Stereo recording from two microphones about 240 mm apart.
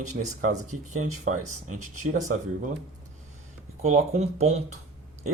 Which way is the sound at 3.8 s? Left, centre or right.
Right.